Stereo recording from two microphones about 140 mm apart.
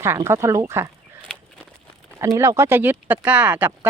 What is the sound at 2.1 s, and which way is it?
Speech, 20° right (ahead or behind).